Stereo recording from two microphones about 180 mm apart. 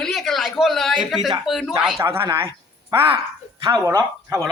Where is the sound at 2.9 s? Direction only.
30° right (ahead or behind).